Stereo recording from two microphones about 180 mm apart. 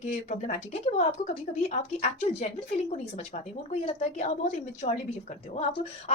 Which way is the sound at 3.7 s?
35° left (ahead or behind).